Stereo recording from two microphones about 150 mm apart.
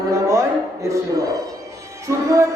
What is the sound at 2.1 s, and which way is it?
Speech, 20° right (ahead or behind).